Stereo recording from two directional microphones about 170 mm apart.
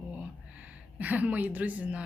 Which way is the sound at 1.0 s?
10° right (ahead or behind).